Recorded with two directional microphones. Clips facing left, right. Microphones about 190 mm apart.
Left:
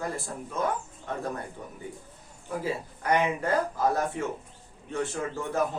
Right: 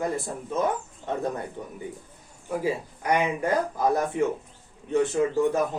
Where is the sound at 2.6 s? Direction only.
15° right (ahead or behind).